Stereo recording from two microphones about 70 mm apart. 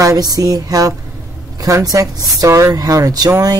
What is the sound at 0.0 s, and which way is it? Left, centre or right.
Speech, right.